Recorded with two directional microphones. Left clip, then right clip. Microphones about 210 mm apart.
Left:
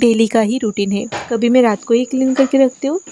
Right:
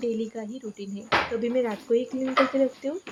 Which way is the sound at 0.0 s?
55° left (ahead or behind).